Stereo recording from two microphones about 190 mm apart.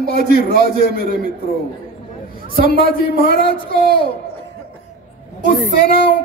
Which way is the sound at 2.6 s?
50° right (ahead or behind).